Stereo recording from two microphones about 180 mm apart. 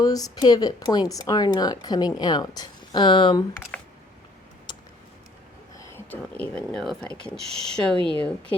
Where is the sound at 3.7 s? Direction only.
10° left (ahead or behind).